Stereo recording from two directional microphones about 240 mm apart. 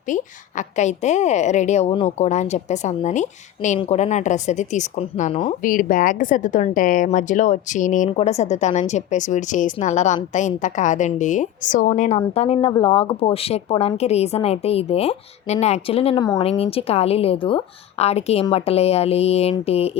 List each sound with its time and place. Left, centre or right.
0.1 s a woman's voice: left